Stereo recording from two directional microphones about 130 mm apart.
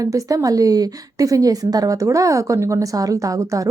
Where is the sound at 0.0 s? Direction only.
25° right (ahead or behind).